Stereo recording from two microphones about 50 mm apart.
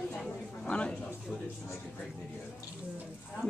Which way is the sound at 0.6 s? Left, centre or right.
Left.